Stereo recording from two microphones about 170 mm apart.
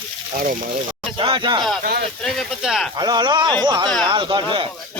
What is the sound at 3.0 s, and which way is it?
Speech, 25° right (ahead or behind).